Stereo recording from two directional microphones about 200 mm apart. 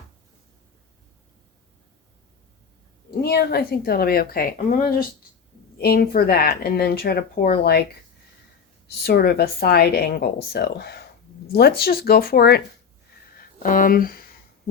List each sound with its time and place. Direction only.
3.1 s speech: 50° left (ahead or behind)
9.0 s speech: 55° left (ahead or behind)